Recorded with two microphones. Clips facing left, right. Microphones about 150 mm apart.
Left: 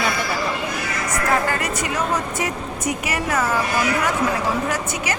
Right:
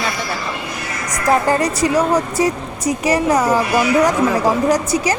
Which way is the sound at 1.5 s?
35° right (ahead or behind).